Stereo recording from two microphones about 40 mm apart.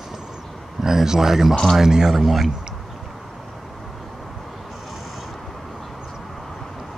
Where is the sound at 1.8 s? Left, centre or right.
Centre.